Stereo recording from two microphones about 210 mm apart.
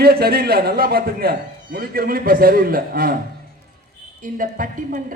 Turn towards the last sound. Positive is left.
turn(degrees=-40)  # may be behind; listen again after turning